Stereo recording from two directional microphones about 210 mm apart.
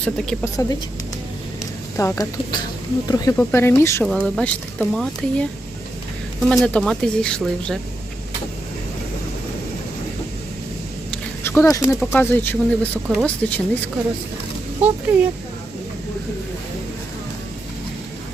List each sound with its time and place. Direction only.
0.0 s speech: 5° left (ahead or behind)
2.0 s speech: 15° left (ahead or behind)
4.0 s speech: centre (ahead or behind)
6.5 s speech: centre (ahead or behind)
11.1 s a sound: 10° left (ahead or behind)
12.1 s speech: 10° left (ahead or behind)
15.1 s speech: 10° right (ahead or behind)